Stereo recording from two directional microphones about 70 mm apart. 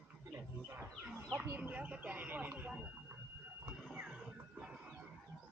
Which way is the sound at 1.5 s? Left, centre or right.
Right.